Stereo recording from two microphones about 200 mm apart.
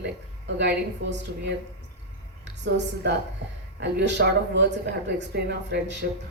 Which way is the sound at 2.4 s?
60° right (ahead or behind).